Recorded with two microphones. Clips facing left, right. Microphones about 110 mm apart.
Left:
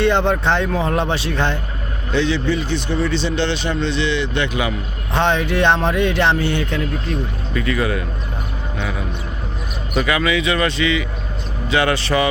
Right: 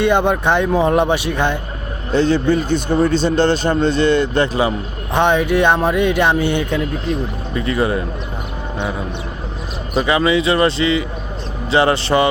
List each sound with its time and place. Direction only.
0.0 s speech: 15° right (ahead or behind)
2.1 s a man's voice: 45° right (ahead or behind)
5.1 s speech: 15° right (ahead or behind)
7.5 s a man's voice: 30° right (ahead or behind)